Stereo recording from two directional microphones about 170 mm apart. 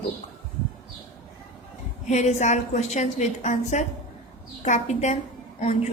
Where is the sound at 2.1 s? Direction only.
45° left (ahead or behind).